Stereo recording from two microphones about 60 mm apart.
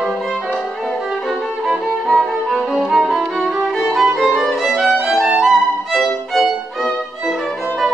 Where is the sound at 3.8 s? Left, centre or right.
Centre.